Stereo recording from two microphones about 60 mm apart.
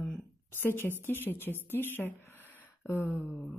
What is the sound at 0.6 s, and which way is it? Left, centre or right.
Speech, left.